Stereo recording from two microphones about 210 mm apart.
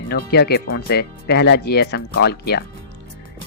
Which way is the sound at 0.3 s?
50° left (ahead or behind).